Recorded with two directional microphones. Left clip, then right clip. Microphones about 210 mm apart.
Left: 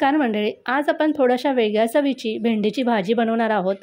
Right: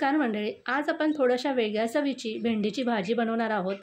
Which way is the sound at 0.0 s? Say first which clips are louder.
Left 7 dB; 30° left (ahead or behind).